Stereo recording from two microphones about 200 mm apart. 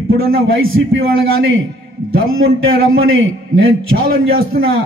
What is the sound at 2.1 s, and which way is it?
A man's voice, 90° right.